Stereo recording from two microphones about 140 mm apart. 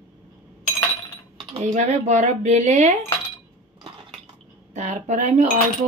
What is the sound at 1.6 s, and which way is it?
Speech, 60° right (ahead or behind).